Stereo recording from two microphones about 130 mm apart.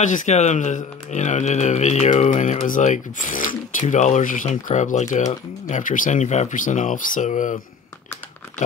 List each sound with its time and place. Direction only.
0.0 s speech: 75° left (ahead or behind)